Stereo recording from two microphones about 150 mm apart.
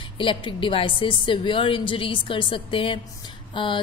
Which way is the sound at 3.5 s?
35° left (ahead or behind).